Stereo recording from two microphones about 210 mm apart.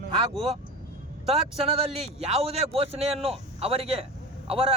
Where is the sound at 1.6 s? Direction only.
25° right (ahead or behind).